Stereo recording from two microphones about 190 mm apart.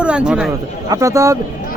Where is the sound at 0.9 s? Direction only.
15° right (ahead or behind).